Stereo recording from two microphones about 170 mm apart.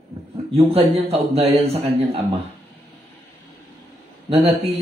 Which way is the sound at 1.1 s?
35° right (ahead or behind).